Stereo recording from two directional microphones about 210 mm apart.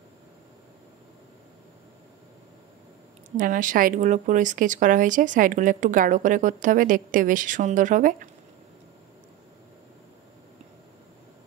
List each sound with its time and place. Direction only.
3.3 s speech: 40° right (ahead or behind)